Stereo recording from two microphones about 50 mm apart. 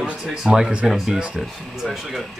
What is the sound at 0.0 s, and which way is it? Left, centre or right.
Speech, centre.